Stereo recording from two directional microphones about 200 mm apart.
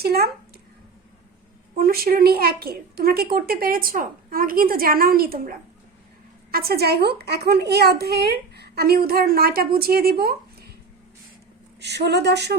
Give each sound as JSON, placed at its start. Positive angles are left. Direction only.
{"t": 0.0, "sound": "speech", "side_deg": -50}
{"t": 1.8, "sound": "a woman's voice", "side_deg": -50}
{"t": 11.8, "sound": "speech", "side_deg": -55}